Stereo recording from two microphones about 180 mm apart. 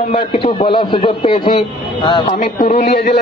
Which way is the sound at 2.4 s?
50° left (ahead or behind).